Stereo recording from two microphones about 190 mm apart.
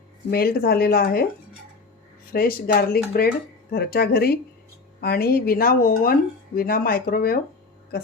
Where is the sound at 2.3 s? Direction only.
50° left (ahead or behind).